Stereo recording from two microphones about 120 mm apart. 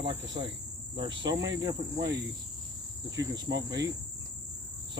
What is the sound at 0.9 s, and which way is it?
Cricket, 40° right (ahead or behind).